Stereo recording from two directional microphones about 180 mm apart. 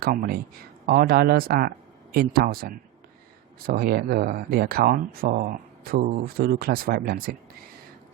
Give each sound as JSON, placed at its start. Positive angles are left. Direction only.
{"t": 0.0, "sound": "speech", "side_deg": -55}